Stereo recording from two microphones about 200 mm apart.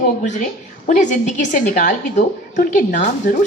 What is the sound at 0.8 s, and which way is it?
Speech, 40° left (ahead or behind).